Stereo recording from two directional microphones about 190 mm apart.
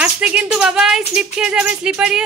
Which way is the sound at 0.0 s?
5° right (ahead or behind).